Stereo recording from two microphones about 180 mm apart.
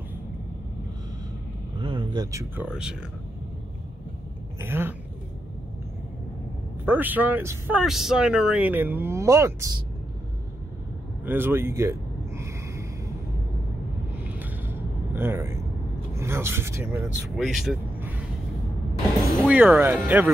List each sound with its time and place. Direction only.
1.8 s vehicle: 30° right (ahead or behind)
2.5 s speech: 5° right (ahead or behind)
4.6 s speech: 10° right (ahead or behind)
6.9 s a man's voice: 10° right (ahead or behind)
11.2 s a sound: 10° right (ahead or behind)
14.2 s a sound: 10° right (ahead or behind)
16.2 s a man's voice: 15° right (ahead or behind)
17.4 s speech: centre (ahead or behind)
19.4 s a man's voice: 10° right (ahead or behind)